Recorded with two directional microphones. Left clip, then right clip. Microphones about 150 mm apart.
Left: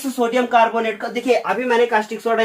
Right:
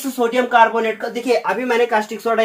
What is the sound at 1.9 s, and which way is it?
Speech, 45° right (ahead or behind).